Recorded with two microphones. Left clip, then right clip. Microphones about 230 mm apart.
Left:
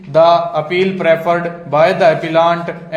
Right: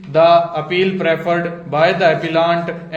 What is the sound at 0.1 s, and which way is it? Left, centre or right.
Speech, centre.